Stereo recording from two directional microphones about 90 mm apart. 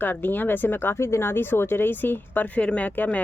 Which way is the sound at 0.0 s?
20° left (ahead or behind).